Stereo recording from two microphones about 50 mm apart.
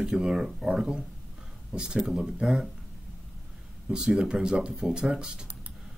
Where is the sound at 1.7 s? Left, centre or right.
Centre.